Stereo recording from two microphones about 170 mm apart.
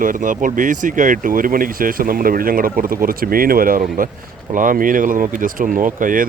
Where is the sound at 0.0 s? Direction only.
50° right (ahead or behind).